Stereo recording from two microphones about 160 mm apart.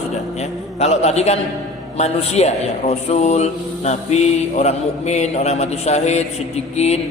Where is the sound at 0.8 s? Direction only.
45° left (ahead or behind).